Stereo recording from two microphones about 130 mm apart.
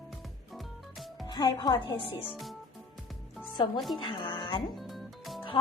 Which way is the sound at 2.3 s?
Centre (ahead or behind).